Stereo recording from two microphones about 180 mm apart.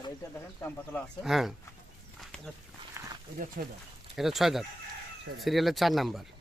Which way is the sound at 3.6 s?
55° right (ahead or behind).